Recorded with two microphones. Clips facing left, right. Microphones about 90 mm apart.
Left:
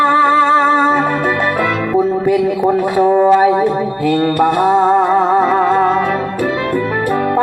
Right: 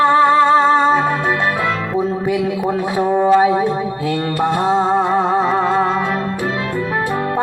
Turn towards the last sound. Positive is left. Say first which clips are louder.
# left 4 dB
turn(degrees=50)  # may be behind; listen again after turning